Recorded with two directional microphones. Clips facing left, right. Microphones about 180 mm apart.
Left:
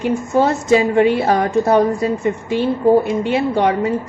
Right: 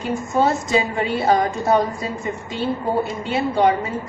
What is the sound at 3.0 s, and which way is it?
Speech, 60° left (ahead or behind).